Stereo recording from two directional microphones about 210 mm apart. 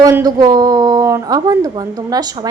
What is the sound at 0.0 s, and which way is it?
A woman's voice, 15° right (ahead or behind).